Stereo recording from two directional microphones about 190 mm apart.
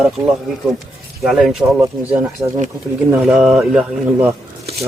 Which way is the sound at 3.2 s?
5° right (ahead or behind).